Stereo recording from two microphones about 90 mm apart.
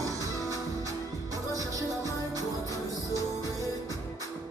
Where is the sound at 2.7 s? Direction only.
40° left (ahead or behind).